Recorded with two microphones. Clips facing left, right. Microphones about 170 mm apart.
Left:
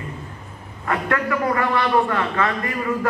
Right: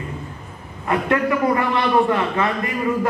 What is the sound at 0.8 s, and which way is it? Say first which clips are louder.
A man's voice: right 3 dB; 20° right (ahead or behind).